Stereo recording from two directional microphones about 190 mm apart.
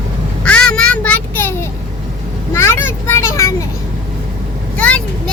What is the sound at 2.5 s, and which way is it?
Vehicle, 15° left (ahead or behind).